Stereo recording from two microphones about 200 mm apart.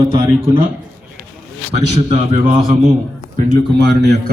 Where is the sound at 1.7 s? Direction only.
30° right (ahead or behind).